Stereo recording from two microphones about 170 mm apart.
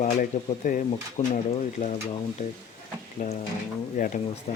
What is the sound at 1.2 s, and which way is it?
Speech, 40° left (ahead or behind).